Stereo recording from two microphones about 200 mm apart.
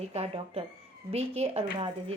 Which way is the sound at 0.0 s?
30° right (ahead or behind).